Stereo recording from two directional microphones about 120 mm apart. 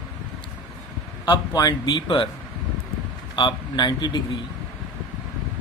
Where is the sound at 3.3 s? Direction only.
40° left (ahead or behind).